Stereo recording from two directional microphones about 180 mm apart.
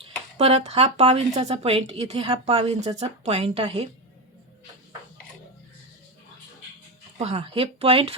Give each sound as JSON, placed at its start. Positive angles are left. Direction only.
{"t": 0.0, "sound": "speech", "side_deg": -35}
{"t": 7.2, "sound": "speech", "side_deg": -35}